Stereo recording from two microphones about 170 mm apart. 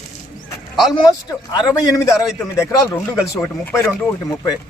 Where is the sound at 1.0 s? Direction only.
20° left (ahead or behind).